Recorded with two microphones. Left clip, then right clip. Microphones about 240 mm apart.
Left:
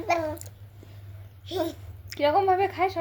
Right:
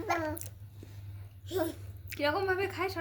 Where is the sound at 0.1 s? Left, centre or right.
Right.